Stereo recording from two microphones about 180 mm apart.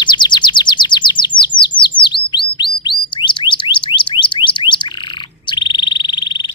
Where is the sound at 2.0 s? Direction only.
25° left (ahead or behind).